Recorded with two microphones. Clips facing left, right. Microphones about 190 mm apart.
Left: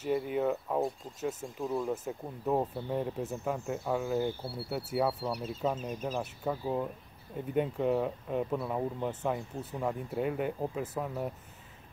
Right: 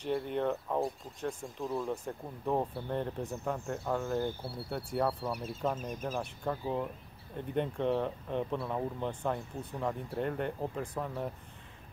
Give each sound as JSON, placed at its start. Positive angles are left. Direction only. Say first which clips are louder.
{"t": 0.0, "sound": "speech", "louder": "left 2 dB", "side_deg": 5}
{"t": 5.3, "sound": "speech", "louder": "left 2 dB", "side_deg": -10}
{"t": 6.1, "sound": "speech", "louder": "left 1 dB", "side_deg": 5}